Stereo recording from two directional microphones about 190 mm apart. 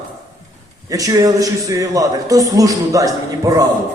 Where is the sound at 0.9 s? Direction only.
20° right (ahead or behind).